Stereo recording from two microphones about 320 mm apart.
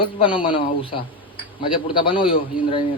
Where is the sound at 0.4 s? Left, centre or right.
Centre.